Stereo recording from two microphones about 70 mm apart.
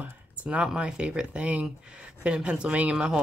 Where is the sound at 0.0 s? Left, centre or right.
Centre.